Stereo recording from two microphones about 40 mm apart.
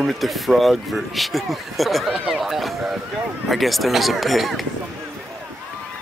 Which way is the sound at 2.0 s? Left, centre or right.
Centre.